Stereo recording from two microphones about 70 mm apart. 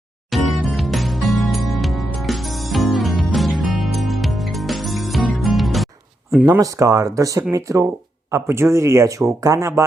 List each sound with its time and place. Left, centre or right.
0.3 s music: centre
6.5 s speech: right
8.3 s speech: right